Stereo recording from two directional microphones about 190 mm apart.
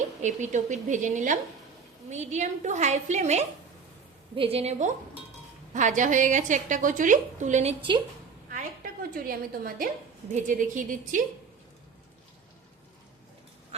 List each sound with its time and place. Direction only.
0.2 s a woman's voice: 40° right (ahead or behind)
8.5 s a woman's voice: 50° right (ahead or behind)